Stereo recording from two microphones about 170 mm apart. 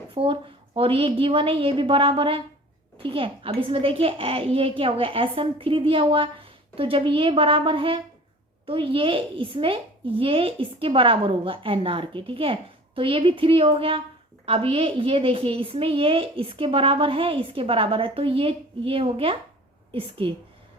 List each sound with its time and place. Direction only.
0.1 s a woman's voice: 30° right (ahead or behind)